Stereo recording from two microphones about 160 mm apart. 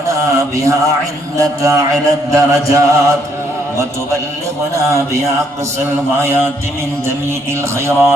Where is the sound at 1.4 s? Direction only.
20° right (ahead or behind).